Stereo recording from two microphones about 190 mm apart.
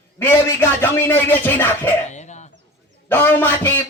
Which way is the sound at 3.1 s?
10° left (ahead or behind).